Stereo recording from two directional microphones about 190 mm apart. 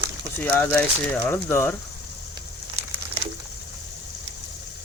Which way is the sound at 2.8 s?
35° right (ahead or behind).